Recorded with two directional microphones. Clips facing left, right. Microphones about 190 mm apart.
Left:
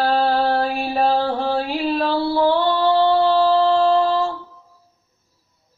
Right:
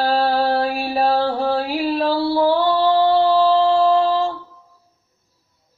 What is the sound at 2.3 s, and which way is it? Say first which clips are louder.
Music: right 1 dB; 10° right (ahead or behind).